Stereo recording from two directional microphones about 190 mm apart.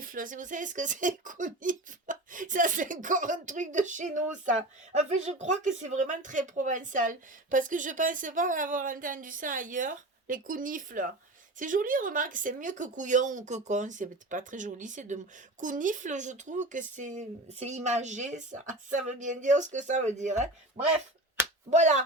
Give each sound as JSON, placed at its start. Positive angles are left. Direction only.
{"t": 0.0, "sound": "speech", "side_deg": -45}
{"t": 21.7, "sound": "speech", "side_deg": -40}